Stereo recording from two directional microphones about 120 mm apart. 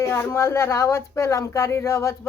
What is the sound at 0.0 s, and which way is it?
Speech, 20° left (ahead or behind).